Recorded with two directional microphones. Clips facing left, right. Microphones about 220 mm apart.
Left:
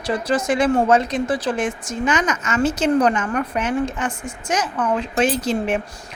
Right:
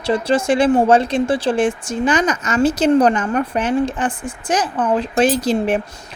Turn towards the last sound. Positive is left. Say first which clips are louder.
# right 4 dB
turn(degrees=-35)  # may be behind; listen again after turning